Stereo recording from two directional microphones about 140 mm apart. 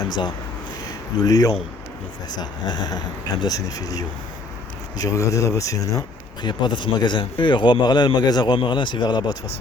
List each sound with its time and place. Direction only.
1.1 s speech: 25° left (ahead or behind)